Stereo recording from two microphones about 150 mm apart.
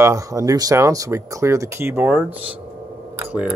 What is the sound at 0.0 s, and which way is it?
Speech, 20° right (ahead or behind).